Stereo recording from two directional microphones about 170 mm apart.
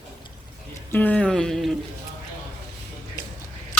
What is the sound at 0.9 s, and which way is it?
Speech, 10° left (ahead or behind).